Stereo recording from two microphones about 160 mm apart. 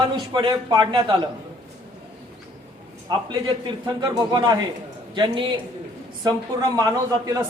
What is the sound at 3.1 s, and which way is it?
A man's voice, 25° right (ahead or behind).